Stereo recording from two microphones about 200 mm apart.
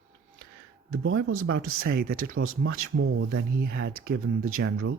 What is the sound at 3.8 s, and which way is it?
Speech, 90° right.